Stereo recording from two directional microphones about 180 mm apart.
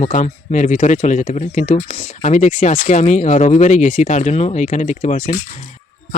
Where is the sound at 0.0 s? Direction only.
40° left (ahead or behind).